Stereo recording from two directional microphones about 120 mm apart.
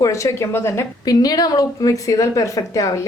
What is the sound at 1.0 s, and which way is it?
Speech, 30° left (ahead or behind).